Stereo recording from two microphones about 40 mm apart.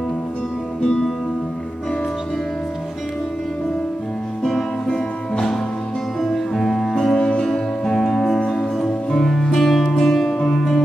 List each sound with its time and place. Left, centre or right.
0.8 s music: centre
4.4 s music: centre